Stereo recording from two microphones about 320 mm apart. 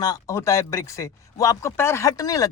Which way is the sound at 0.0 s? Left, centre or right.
Centre.